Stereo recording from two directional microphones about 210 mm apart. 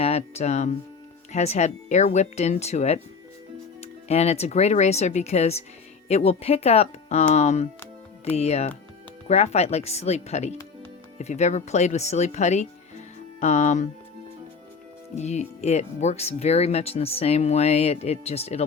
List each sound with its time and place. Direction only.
0.0 s speech: 30° left (ahead or behind)
15.1 s speech: 35° left (ahead or behind)